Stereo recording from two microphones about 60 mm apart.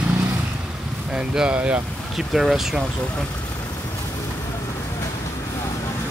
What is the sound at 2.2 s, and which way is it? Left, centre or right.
Speech, centre.